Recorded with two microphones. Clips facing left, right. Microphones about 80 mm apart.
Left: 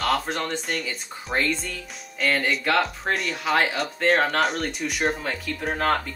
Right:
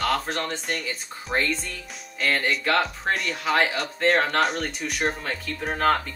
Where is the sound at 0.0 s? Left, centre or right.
Centre.